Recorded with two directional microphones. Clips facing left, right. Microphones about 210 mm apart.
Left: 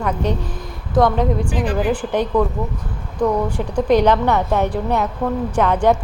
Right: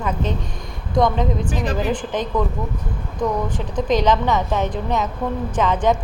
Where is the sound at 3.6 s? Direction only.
10° left (ahead or behind).